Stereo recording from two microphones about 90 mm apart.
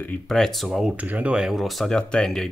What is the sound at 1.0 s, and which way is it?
Speech, 15° right (ahead or behind).